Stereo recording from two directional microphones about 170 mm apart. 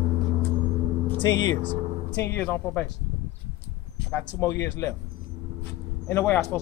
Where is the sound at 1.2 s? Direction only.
25° left (ahead or behind).